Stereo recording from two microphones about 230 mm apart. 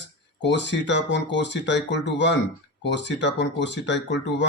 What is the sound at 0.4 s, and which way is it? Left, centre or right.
Speech, left.